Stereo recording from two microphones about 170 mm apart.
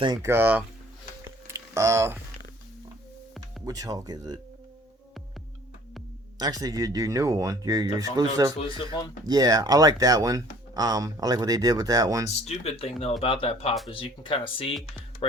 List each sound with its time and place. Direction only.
0.0 s speech: 20° right (ahead or behind)
1.2 s a sound: 15° right (ahead or behind)
3.7 s speech: 20° right (ahead or behind)
6.4 s speech: 20° right (ahead or behind)
12.5 s speech: 35° left (ahead or behind)